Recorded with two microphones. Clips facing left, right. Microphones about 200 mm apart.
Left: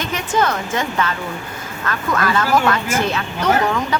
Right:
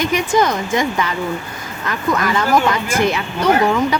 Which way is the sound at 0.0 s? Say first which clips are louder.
Right 4 dB; 15° right (ahead or behind).